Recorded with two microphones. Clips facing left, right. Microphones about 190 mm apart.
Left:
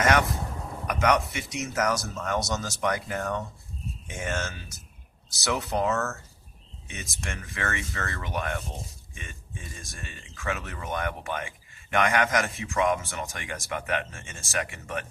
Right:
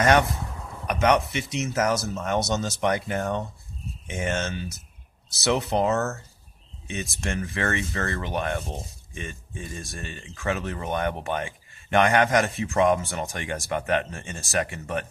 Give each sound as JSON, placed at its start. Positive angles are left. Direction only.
{"t": 0.0, "sound": "speech", "side_deg": -30}
{"t": 9.7, "sound": "speech", "side_deg": -35}